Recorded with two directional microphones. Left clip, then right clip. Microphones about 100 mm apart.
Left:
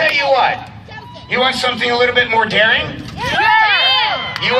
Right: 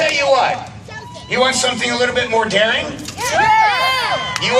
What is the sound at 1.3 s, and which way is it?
Speech, 10° right (ahead or behind).